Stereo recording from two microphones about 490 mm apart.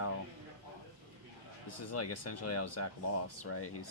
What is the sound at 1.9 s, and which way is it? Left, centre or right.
Speech, left.